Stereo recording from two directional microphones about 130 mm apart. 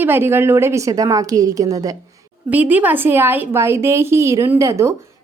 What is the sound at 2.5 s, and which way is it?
A woman's voice, 15° right (ahead or behind).